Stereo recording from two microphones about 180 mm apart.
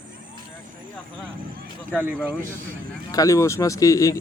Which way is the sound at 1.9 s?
10° right (ahead or behind).